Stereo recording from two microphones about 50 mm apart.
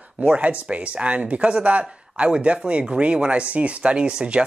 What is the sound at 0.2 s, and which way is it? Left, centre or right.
Speech, right.